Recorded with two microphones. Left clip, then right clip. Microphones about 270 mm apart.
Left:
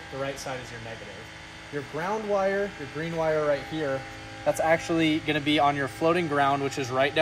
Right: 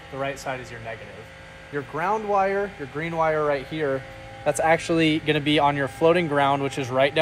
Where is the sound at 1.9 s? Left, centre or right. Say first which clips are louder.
Right 5 dB; centre.